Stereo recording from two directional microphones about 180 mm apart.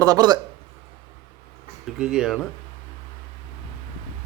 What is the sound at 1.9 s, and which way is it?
Speech, 5° right (ahead or behind).